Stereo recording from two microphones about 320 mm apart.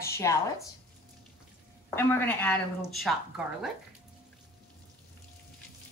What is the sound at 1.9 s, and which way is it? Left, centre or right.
Speech, centre.